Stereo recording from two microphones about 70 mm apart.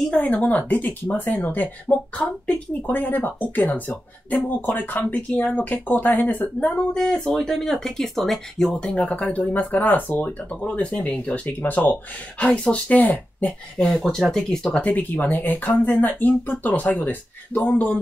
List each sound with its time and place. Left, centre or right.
0.1 s speech: left
13.7 s speech: centre; by 18.0 s left